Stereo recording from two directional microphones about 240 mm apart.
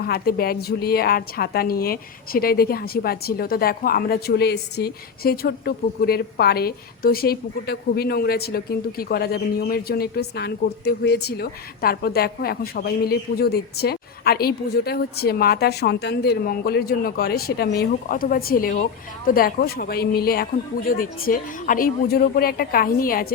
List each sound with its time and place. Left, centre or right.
0.0 s a woman's voice: left